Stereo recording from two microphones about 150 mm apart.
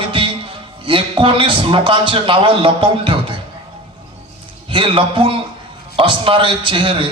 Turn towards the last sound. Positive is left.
turn(degrees=-35)  # may be behind; listen again after turning